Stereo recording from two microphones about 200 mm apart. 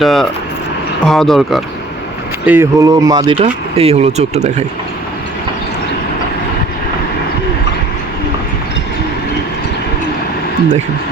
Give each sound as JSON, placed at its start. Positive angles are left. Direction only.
{"t": 0.0, "sound": "speech", "side_deg": 0}
{"t": 2.5, "sound": "speech", "side_deg": -15}